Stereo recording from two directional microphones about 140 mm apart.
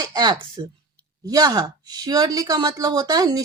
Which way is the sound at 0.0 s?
30° right (ahead or behind).